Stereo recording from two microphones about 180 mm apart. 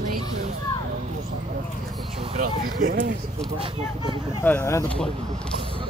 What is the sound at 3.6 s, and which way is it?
Speech, 25° right (ahead or behind).